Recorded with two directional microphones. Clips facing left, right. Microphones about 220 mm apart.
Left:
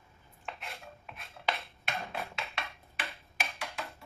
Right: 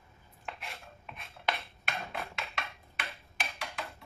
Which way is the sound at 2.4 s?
Centre (ahead or behind).